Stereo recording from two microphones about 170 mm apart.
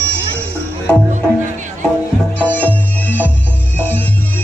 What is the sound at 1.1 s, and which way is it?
Music, 45° right (ahead or behind).